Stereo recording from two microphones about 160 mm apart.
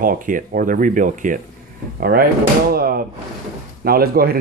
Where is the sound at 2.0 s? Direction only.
70° right (ahead or behind).